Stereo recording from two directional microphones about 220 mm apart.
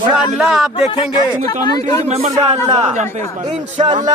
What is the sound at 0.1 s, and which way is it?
Speech, 5° right (ahead or behind).